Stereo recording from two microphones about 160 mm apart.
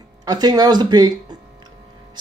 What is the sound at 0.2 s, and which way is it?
Speech, 25° right (ahead or behind).